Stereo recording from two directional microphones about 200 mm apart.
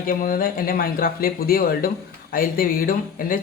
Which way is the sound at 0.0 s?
45° left (ahead or behind).